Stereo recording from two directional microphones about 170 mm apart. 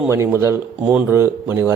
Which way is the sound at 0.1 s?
15° right (ahead or behind).